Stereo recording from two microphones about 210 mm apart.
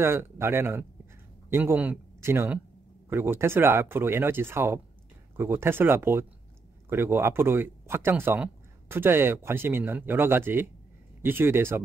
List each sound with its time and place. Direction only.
0.0 s speech: 10° right (ahead or behind)